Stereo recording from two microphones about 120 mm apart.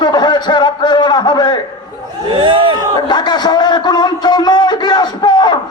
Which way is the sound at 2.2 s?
45° right (ahead or behind).